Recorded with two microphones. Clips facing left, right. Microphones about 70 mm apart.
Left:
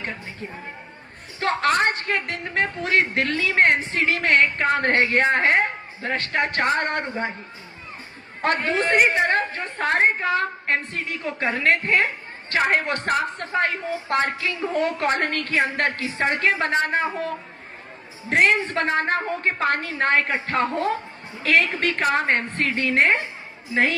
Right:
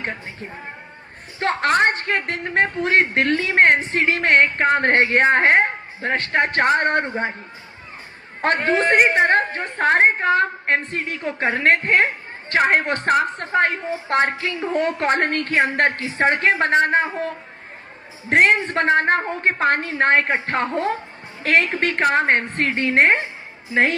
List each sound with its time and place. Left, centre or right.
1.4 s a woman's voice: right
8.4 s a woman's voice: right